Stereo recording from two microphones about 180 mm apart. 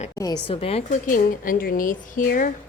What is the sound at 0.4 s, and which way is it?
Speech, 30° left (ahead or behind).